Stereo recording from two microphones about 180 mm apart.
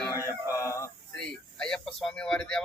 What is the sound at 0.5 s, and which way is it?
Chicken, 15° left (ahead or behind).